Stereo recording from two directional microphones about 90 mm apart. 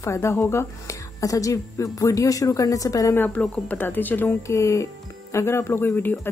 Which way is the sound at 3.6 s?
20° left (ahead or behind).